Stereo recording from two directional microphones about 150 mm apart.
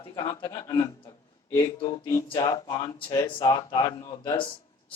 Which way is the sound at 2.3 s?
30° left (ahead or behind).